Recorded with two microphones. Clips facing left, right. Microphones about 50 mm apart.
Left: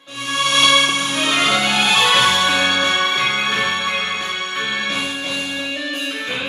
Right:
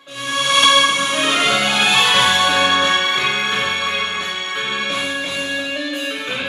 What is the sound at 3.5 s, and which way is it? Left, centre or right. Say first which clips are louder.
Music: even; centre.